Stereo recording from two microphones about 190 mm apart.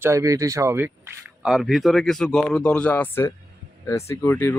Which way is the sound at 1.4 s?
Centre (ahead or behind).